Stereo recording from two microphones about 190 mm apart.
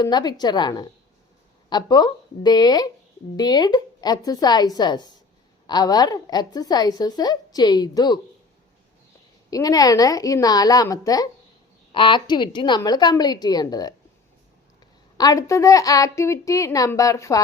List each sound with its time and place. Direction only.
0.0 s a woman's voice: 20° left (ahead or behind)
9.5 s a woman's voice: 20° left (ahead or behind)
15.2 s a woman's voice: 15° left (ahead or behind)